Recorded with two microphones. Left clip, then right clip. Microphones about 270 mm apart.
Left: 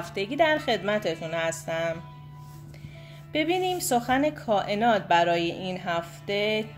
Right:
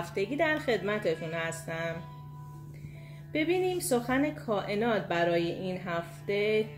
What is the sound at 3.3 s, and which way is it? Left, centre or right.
A woman's voice, left.